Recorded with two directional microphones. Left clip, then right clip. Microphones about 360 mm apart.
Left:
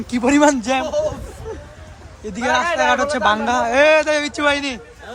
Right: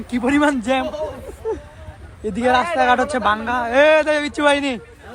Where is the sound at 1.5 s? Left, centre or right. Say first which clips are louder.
Right 7 dB; centre.